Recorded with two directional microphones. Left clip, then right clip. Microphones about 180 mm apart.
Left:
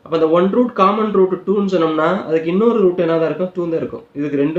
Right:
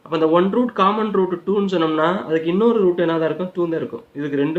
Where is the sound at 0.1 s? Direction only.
45° right (ahead or behind).